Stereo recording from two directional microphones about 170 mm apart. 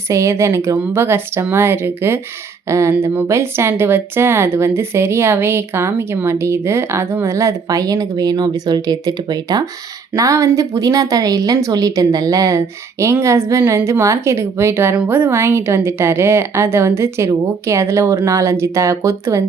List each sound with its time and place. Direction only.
0.1 s a woman's voice: 15° right (ahead or behind)